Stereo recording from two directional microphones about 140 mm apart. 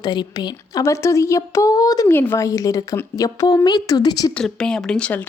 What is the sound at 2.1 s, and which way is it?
A woman's voice, 15° left (ahead or behind).